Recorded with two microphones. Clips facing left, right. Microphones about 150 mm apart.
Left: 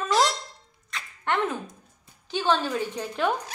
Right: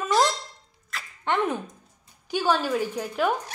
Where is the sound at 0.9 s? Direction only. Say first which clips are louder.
Even; 5° right (ahead or behind).